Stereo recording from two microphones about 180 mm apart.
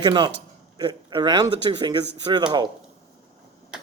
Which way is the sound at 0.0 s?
25° right (ahead or behind).